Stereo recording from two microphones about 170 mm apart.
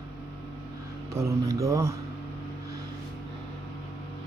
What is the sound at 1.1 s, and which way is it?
Speech, 20° right (ahead or behind).